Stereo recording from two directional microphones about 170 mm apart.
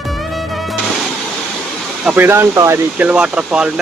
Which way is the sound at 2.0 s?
10° right (ahead or behind).